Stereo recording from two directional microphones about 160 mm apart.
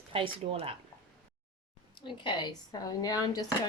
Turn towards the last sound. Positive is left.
turn(degrees=25)  # may be behind; listen again after turning